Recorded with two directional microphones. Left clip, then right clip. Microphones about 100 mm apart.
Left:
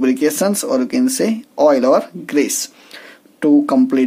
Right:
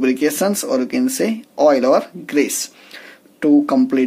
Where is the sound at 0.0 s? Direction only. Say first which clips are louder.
Left 1 dB; 20° left (ahead or behind).